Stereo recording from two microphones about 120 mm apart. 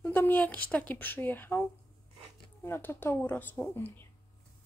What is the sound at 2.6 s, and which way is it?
A woman's voice, 20° left (ahead or behind).